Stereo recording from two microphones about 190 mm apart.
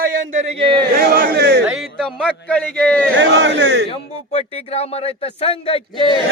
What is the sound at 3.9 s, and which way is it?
Speech, 35° left (ahead or behind).